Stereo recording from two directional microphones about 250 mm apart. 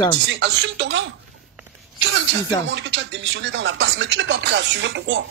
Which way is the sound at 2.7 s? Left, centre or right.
Right.